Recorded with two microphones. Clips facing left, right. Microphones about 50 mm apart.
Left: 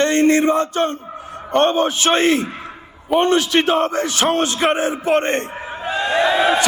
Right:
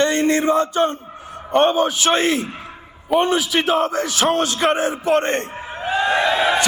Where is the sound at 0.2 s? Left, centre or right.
Left.